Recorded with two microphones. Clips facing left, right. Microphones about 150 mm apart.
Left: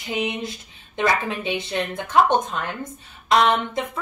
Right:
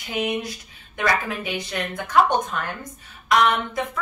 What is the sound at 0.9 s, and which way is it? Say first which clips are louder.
A woman's voice: left 2 dB; 20° left (ahead or behind).